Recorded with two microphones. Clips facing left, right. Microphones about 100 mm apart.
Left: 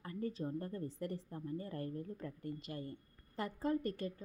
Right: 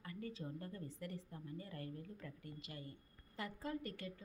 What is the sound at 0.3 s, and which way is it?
A woman's voice, 40° left (ahead or behind).